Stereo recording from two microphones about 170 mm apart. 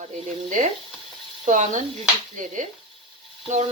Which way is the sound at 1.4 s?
45° right (ahead or behind).